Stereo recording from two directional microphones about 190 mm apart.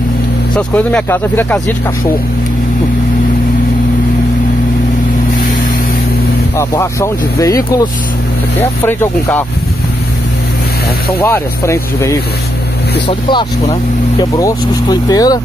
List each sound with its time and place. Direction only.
0.6 s speech: 10° left (ahead or behind)
6.5 s speech: 15° left (ahead or behind)
11.1 s speech: 15° left (ahead or behind)
13.3 s speech: 25° left (ahead or behind)